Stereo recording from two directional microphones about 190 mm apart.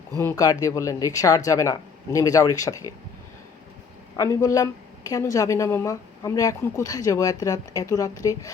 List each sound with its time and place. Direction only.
0.2 s a woman's voice: 15° left (ahead or behind)
4.2 s a woman's voice: 15° left (ahead or behind)